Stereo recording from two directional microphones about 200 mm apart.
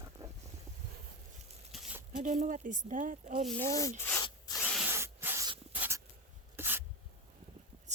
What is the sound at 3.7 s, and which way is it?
Speech, 15° left (ahead or behind).